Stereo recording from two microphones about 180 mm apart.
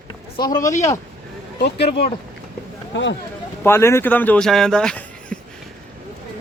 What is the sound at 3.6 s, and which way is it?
Speech, 15° left (ahead or behind).